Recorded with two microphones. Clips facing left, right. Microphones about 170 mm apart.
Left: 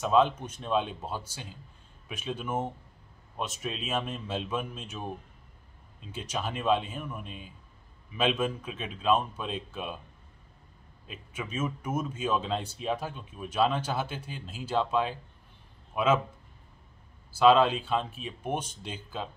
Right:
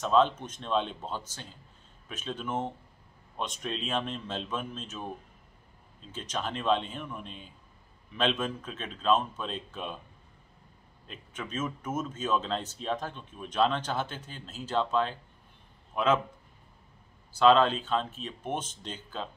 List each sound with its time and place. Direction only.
0.0 s speech: 10° left (ahead or behind)
11.1 s speech: 10° left (ahead or behind)
17.3 s speech: 10° left (ahead or behind)